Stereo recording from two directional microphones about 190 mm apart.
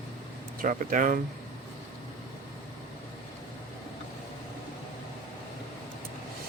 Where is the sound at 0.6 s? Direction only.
45° right (ahead or behind).